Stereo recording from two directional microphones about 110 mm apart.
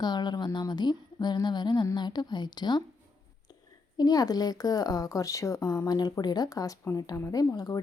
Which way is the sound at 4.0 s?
35° left (ahead or behind).